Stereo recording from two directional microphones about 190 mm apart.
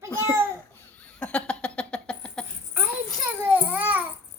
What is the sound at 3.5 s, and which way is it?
Baby cry, 10° right (ahead or behind).